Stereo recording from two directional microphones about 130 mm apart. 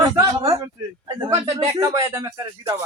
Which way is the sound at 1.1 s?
35° right (ahead or behind).